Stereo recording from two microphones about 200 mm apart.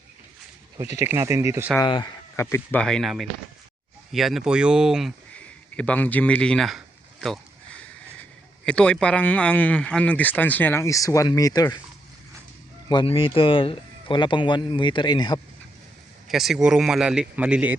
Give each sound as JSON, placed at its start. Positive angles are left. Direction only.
{"t": 0.8, "sound": "speech", "side_deg": -10}
{"t": 1.8, "sound": "speech", "side_deg": 20}
{"t": 8.6, "sound": "speech", "side_deg": 5}
{"t": 12.9, "sound": "speech", "side_deg": 25}
{"t": 16.3, "sound": "speech", "side_deg": 0}